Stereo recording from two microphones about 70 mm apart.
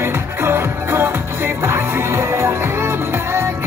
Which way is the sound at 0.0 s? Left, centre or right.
Right.